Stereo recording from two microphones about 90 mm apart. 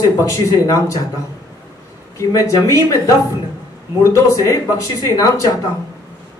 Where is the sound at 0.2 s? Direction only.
35° left (ahead or behind).